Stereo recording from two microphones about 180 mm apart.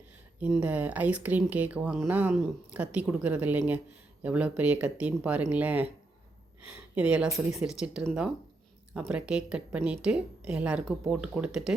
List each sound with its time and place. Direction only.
0.3 s speech: 10° right (ahead or behind)
6.9 s a woman's voice: 5° right (ahead or behind)